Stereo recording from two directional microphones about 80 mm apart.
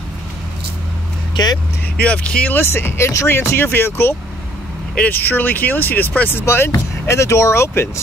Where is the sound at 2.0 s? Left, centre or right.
Centre.